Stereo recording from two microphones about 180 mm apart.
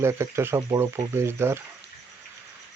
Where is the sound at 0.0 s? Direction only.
15° right (ahead or behind).